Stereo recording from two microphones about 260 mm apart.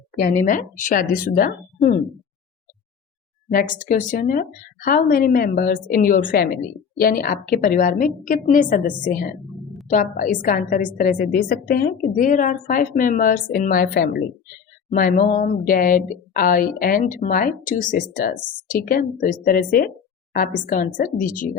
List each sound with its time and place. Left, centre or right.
0.2 s a woman's voice: left
3.5 s a woman's voice: left
14.8 s a sound: left
15.6 s a woman's voice: left